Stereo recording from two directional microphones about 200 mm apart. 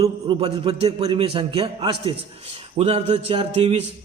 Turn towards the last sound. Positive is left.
turn(degrees=-30)  # may be behind; listen again after turning